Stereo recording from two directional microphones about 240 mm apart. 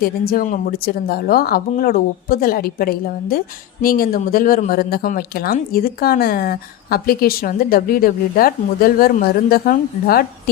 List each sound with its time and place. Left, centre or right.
0.0 s speech: left